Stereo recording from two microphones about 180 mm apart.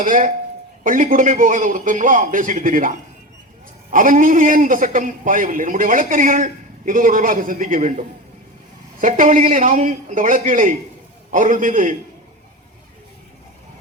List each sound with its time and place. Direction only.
0.0 s a man's voice: 45° right (ahead or behind)
3.9 s a man's voice: 50° right (ahead or behind)